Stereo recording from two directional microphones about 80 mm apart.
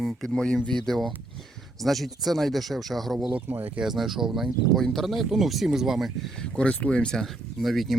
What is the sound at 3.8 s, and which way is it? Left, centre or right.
Speech, centre.